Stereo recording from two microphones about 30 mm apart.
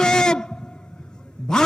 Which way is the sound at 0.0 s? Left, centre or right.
Left.